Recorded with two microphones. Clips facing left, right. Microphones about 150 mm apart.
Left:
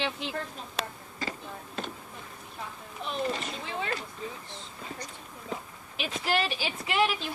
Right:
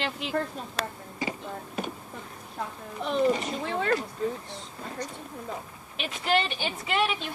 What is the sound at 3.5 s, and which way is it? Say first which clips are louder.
Speech: right 7 dB; 55° right (ahead or behind).